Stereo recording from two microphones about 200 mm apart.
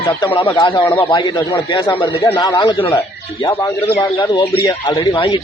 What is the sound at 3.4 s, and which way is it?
Speech, 10° left (ahead or behind).